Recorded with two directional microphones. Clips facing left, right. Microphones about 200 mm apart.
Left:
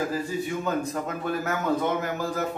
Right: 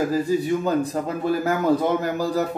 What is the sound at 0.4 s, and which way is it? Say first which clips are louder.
A man's voice: right 6 dB; 35° right (ahead or behind).